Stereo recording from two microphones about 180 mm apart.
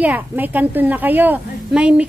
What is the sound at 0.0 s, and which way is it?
A woman's voice, 10° right (ahead or behind).